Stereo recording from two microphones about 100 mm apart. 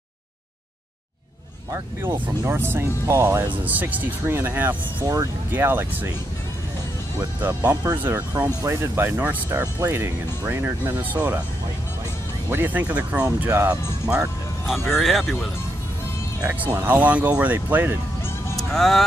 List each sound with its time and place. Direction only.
2.2 s speech: 25° right (ahead or behind)
5.0 s speech: 35° right (ahead or behind)
5.5 s speech: 20° right (ahead or behind)
7.4 s speech: 25° right (ahead or behind)
12.4 s speech: 20° right (ahead or behind)
15.0 s speech: centre (ahead or behind)
16.5 s speech: 15° right (ahead or behind)
18.6 s speech: centre (ahead or behind)